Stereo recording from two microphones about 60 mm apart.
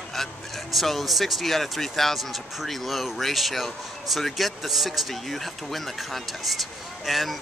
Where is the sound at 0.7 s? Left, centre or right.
Centre.